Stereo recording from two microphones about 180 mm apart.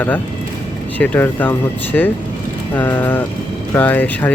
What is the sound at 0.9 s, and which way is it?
Speech, 10° left (ahead or behind).